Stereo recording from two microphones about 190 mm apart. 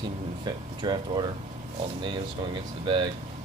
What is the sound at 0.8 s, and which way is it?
Speech, 25° right (ahead or behind).